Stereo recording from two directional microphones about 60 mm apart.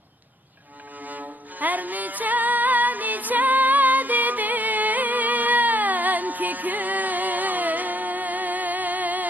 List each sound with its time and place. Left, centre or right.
1.0 s music: right